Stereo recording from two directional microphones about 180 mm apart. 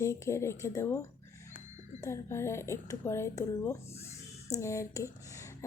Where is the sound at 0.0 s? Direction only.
15° left (ahead or behind).